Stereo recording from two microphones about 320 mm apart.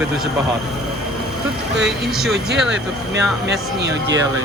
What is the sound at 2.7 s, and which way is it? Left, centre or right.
Speech, right.